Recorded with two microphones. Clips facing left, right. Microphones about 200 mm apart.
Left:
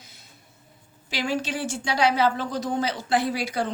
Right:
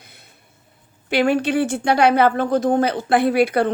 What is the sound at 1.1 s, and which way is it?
Speech, 60° right (ahead or behind).